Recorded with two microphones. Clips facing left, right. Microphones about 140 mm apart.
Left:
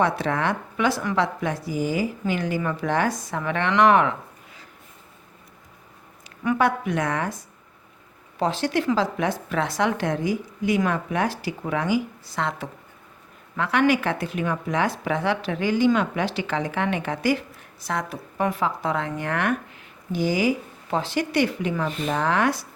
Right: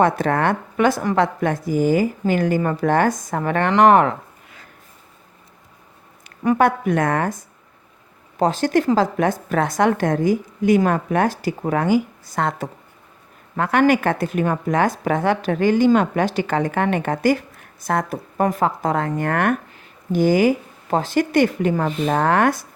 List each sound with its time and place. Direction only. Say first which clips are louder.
0.0 s speech: right 5 dB; 50° right (ahead or behind)
6.4 s speech: right 5 dB; 40° right (ahead or behind)
8.4 s speech: right 5 dB; 45° right (ahead or behind)